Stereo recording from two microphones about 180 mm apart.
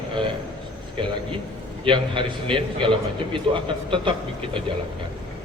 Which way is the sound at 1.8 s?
30° right (ahead or behind).